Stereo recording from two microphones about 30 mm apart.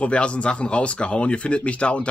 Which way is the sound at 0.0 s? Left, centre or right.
Left.